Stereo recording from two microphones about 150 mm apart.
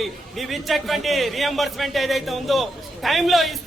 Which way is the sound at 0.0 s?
Centre (ahead or behind).